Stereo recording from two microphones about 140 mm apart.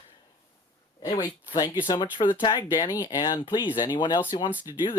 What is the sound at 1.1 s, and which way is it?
Speech, 30° left (ahead or behind).